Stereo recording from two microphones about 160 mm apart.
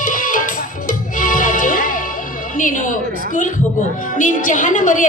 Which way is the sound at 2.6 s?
55° left (ahead or behind).